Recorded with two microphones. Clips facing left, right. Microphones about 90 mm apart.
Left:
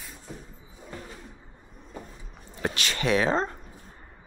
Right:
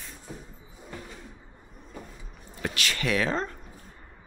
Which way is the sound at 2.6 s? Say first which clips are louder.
Left 2 dB; 25° left (ahead or behind).